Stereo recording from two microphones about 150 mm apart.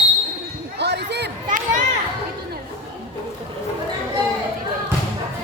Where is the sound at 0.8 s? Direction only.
90° right; by 1.8 s 60° right (ahead or behind).